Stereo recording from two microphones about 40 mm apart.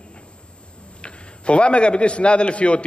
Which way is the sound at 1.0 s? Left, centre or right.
Left.